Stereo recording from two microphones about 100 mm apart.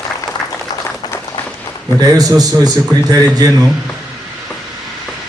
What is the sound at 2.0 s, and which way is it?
A man's voice, 40° right (ahead or behind).